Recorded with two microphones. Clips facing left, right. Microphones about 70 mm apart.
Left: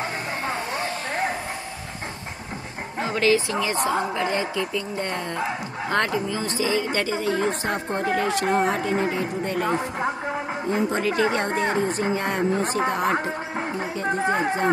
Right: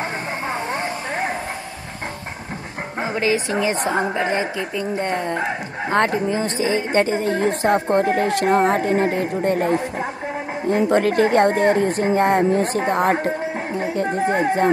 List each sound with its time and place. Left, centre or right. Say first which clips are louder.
0.7 s a sound: right 3 dB; right
3.0 s a woman's voice: even; right
10.7 s speech: right 7 dB; right